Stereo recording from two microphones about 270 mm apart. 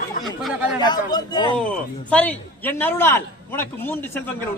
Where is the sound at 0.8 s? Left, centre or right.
Centre.